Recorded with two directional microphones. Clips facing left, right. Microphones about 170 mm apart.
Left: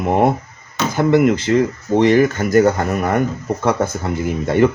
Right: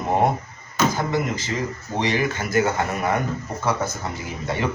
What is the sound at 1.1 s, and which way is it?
Speech, 65° left (ahead or behind).